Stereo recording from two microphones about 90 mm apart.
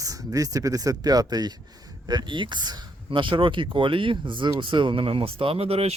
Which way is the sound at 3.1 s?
70° right (ahead or behind).